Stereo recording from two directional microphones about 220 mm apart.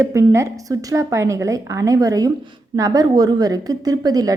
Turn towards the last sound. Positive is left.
turn(degrees=-15)  # may be behind; listen again after turning